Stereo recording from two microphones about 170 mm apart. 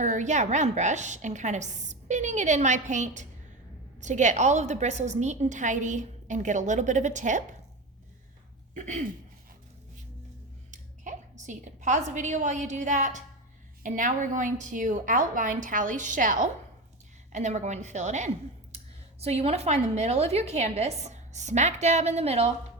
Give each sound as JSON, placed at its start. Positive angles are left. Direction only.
{"t": 0.0, "sound": "a woman's voice", "side_deg": -45}
{"t": 8.7, "sound": "a sound", "side_deg": -45}
{"t": 10.7, "sound": "a woman's voice", "side_deg": -45}